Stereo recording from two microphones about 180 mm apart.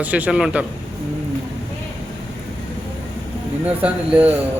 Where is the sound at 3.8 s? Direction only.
5° right (ahead or behind).